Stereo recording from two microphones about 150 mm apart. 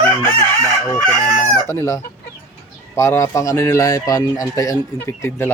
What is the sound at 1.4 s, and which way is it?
Speech, 20° left (ahead or behind).